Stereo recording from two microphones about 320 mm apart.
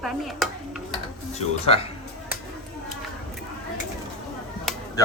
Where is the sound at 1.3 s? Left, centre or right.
Centre.